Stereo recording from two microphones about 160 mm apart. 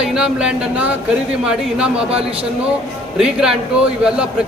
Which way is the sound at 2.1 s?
35° right (ahead or behind).